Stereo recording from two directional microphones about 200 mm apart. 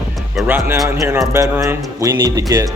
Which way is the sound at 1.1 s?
15° right (ahead or behind).